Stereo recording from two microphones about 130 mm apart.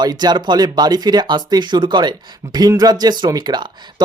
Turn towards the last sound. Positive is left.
turn(degrees=-35)  # may be behind; listen again after turning